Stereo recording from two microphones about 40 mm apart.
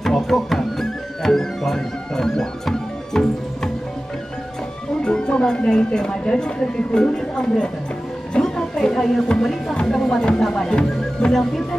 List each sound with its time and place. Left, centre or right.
0.0 s music: centre
5.0 s music: left
5.7 s speech: left
8.4 s music: centre
9.4 s speech: centre
9.8 s speech: centre